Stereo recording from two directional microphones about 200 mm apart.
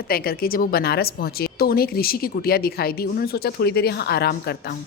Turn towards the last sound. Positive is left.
turn(degrees=50)  # may be behind; listen again after turning